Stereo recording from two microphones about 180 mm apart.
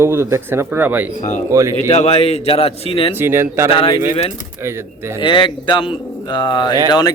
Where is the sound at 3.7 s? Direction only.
30° left (ahead or behind).